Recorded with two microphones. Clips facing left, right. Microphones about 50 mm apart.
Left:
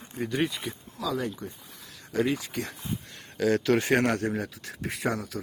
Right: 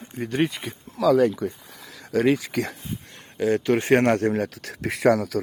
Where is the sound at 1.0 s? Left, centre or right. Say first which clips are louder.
Right 13 dB; right.